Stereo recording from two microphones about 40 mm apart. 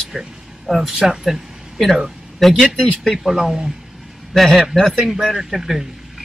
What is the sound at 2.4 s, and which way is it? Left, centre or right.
Speech, centre.